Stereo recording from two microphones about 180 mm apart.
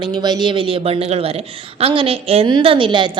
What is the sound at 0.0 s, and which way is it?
A woman's voice, 25° right (ahead or behind).